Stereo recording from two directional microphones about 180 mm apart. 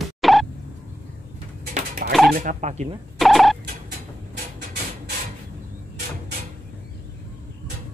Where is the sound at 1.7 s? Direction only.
50° right (ahead or behind).